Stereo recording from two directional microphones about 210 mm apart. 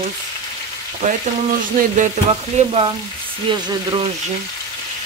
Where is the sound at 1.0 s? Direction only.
35° right (ahead or behind).